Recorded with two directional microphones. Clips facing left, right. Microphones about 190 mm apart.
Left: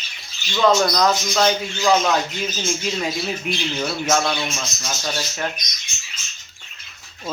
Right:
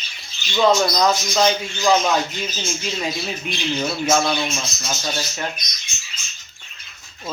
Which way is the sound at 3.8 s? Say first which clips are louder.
Right 2 dB; 10° right (ahead or behind).